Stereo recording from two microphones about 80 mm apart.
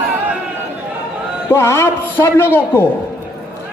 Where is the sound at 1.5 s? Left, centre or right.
Left.